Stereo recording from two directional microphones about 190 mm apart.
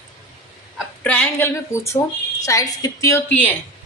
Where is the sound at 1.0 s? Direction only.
10° left (ahead or behind).